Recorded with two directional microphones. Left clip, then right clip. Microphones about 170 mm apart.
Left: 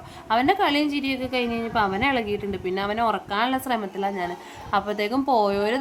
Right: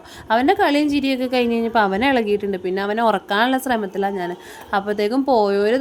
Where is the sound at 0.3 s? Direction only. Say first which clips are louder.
Right 4 dB; 30° right (ahead or behind).